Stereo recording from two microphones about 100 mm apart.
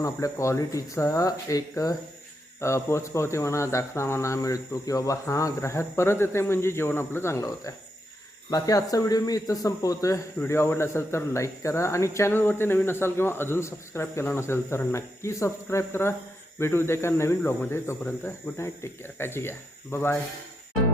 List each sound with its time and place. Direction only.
0.0 s speech: 30° left (ahead or behind)
10.4 s speech: 25° left (ahead or behind)